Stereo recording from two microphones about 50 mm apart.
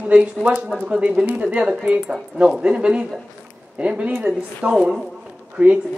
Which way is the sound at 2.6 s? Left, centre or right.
Right.